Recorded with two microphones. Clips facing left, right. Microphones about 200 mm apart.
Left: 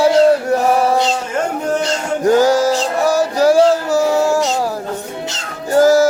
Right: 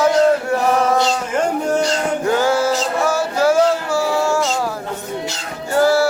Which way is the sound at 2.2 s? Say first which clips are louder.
Left 6 dB; 40° left (ahead or behind).